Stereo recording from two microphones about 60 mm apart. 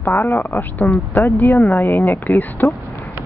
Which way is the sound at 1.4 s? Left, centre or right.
Left.